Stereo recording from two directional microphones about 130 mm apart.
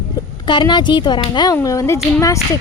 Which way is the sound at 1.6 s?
25° left (ahead or behind).